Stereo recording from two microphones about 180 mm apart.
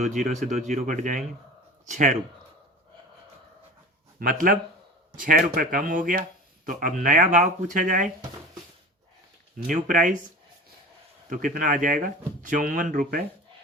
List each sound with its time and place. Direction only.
0.0 s speech: 40° right (ahead or behind)
4.2 s speech: 50° right (ahead or behind)
9.6 s speech: 45° right (ahead or behind)
11.3 s speech: 45° right (ahead or behind)